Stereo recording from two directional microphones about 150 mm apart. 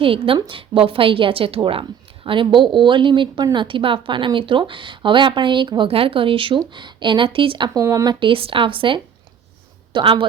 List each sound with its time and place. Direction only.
0.0 s a woman's voice: 35° right (ahead or behind)
7.7 s speech: 20° right (ahead or behind)
8.2 s a woman's voice: 35° right (ahead or behind)